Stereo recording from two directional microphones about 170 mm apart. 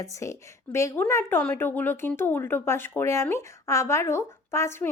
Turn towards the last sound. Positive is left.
turn(degrees=15)  # may be behind; listen again after turning